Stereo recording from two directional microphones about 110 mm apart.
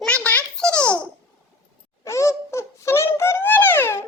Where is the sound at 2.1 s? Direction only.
25° left (ahead or behind).